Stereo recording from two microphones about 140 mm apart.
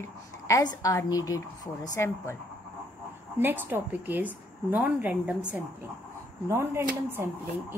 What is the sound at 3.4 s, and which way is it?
A woman's voice, 15° right (ahead or behind).